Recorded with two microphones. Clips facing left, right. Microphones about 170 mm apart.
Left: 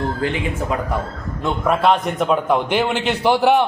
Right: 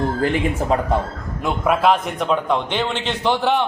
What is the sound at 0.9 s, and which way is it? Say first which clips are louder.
Speech: right 3 dB; 25° right (ahead or behind).